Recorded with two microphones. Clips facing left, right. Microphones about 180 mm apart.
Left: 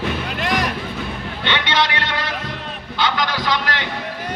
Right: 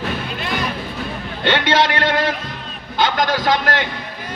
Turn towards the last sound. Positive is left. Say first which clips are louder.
# right 4 dB
turn(degrees=-50)  # may be behind; listen again after turning